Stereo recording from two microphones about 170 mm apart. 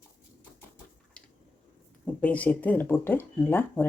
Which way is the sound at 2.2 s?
10° left (ahead or behind).